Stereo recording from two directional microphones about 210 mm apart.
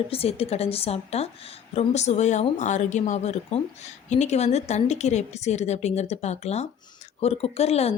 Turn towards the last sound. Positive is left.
turn(degrees=30)  # may be behind; listen again after turning